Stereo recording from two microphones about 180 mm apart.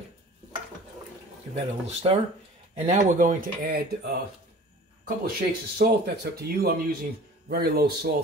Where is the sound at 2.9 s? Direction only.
45° right (ahead or behind).